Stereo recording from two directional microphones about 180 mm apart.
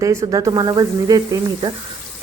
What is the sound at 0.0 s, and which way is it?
Speech, 15° right (ahead or behind).